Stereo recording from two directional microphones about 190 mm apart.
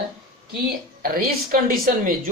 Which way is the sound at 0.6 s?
50° right (ahead or behind).